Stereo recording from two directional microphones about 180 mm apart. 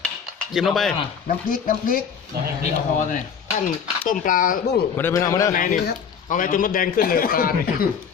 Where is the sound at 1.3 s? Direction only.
50° left (ahead or behind).